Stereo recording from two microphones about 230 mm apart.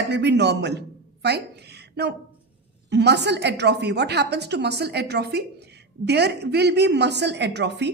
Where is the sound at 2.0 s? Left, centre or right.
Right.